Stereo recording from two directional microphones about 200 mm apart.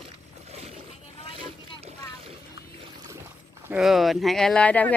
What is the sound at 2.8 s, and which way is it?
Speech, 15° right (ahead or behind).